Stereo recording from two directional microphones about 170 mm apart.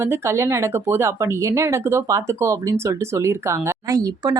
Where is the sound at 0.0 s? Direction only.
15° right (ahead or behind).